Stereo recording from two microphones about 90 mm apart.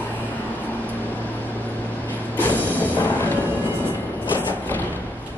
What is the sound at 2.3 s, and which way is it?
Music, 20° left (ahead or behind).